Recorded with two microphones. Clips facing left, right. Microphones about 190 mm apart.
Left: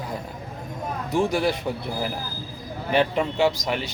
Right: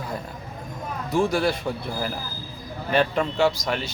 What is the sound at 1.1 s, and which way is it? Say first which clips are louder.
Speech: right 1 dB; 15° left (ahead or behind).